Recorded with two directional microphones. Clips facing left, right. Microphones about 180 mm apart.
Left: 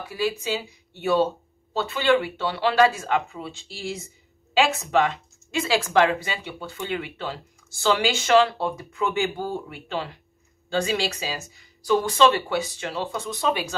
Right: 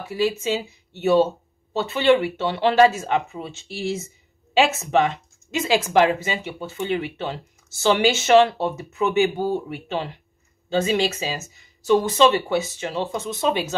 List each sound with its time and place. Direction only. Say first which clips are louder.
0.0 s speech: right 4 dB; 20° right (ahead or behind)